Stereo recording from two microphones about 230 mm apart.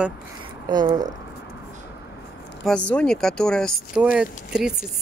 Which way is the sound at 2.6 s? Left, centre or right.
Centre.